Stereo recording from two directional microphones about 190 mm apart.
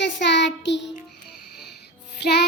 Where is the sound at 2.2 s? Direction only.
60° left (ahead or behind).